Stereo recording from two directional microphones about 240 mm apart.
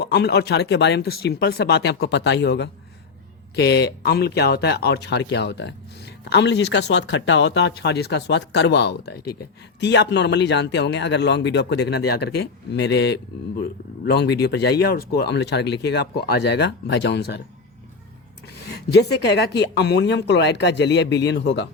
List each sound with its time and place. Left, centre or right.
0.0 s a man's voice: left
18.4 s a man's voice: left